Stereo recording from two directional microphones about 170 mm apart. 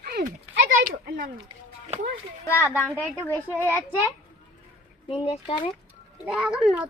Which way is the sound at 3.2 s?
10° left (ahead or behind).